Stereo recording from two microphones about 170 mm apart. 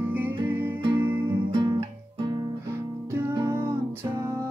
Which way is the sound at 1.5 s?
25° right (ahead or behind).